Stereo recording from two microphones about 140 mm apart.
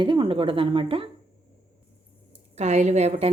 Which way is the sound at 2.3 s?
50° right (ahead or behind).